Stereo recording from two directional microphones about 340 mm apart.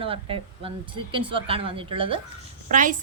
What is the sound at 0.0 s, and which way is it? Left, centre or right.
A woman's voice, centre.